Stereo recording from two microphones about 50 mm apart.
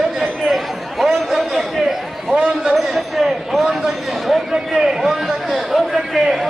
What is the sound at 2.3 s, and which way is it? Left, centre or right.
Speech, centre.